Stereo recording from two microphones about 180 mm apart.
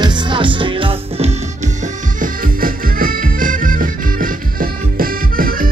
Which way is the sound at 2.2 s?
50° right (ahead or behind).